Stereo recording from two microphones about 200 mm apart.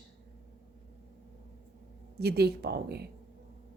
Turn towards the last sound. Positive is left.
turn(degrees=-55)  # may be behind; listen again after turning